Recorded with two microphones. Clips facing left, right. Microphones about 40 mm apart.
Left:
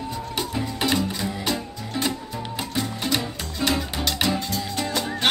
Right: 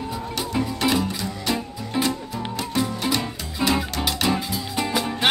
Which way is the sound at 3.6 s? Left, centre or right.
Centre.